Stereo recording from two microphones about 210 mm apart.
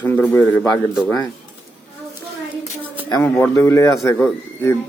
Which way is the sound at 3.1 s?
10° left (ahead or behind).